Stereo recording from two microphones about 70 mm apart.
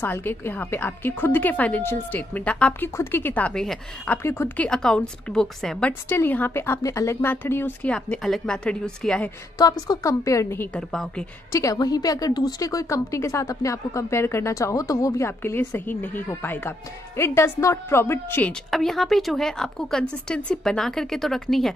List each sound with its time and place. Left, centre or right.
0.0 s a woman's voice: left
3.0 s speech: left
3.4 s a woman's voice: centre
4.2 s speech: left
4.6 s a woman's voice: centre
6.0 s speech: left
6.8 s a woman's voice: left
7.2 s a woman's voice: left
8.2 s a woman's voice: centre
9.6 s a woman's voice: left
10.7 s a woman's voice: centre
11.5 s a woman's voice: left
15.2 s speech: left
18.5 s speech: centre